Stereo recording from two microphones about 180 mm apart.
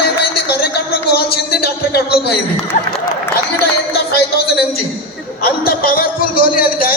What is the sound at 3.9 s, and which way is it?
A man's voice, 60° left (ahead or behind).